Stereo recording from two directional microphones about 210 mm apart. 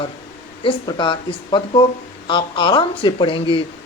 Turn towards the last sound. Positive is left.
turn(degrees=25)  # may be behind; listen again after turning